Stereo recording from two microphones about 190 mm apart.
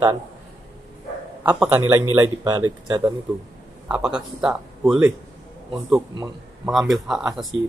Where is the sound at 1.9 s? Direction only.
15° right (ahead or behind).